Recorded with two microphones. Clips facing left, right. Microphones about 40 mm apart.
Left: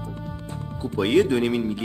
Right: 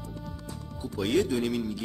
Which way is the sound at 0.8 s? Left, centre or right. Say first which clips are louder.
Left 7 dB; left.